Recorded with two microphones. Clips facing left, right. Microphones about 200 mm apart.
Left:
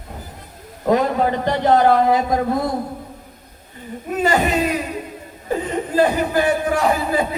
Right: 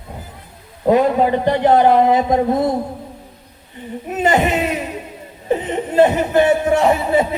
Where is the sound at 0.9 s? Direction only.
15° right (ahead or behind).